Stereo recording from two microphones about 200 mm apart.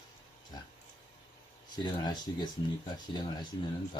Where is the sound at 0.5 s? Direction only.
20° left (ahead or behind).